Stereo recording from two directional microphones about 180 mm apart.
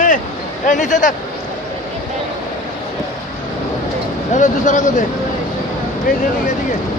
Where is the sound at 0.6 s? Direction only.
45° left (ahead or behind).